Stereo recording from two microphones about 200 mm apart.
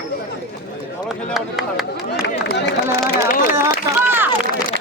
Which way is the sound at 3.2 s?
45° left (ahead or behind).